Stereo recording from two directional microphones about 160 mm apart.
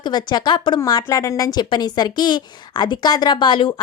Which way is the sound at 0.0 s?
25° left (ahead or behind).